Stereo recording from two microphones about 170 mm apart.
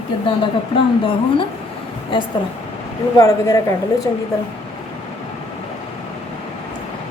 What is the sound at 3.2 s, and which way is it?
Speech, 20° left (ahead or behind).